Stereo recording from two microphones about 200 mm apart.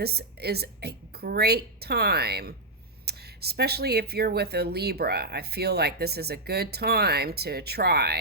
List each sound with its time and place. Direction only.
0.0 s speech: 55° right (ahead or behind)